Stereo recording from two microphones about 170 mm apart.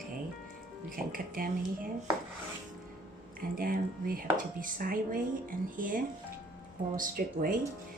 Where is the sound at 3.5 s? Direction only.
55° right (ahead or behind).